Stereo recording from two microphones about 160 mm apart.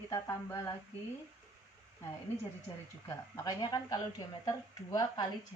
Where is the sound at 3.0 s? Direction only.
20° left (ahead or behind).